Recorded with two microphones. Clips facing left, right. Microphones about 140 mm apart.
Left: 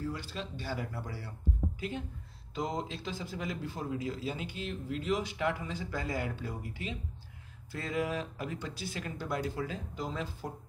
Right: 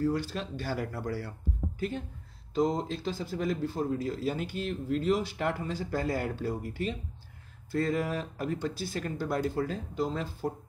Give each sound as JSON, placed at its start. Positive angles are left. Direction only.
{"t": 0.0, "sound": "speech", "side_deg": -40}
{"t": 1.8, "sound": "speech", "side_deg": -45}
{"t": 9.9, "sound": "speech", "side_deg": -35}